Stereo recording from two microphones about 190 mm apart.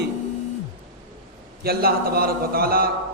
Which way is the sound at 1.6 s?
55° right (ahead or behind).